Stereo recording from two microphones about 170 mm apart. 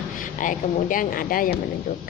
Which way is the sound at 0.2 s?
50° left (ahead or behind).